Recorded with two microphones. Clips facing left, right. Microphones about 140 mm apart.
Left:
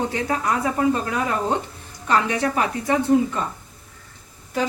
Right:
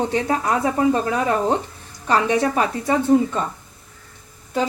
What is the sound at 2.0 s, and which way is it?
Speech, 30° right (ahead or behind).